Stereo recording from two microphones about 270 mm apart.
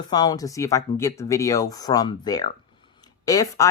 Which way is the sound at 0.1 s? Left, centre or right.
Centre.